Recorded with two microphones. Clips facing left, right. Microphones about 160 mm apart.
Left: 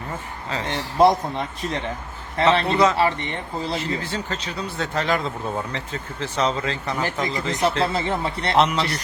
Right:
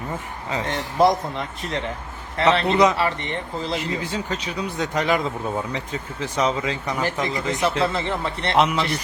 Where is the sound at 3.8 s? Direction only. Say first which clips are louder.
Even; 10° right (ahead or behind).